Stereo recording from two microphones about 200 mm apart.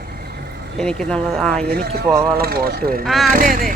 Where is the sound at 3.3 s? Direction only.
45° right (ahead or behind).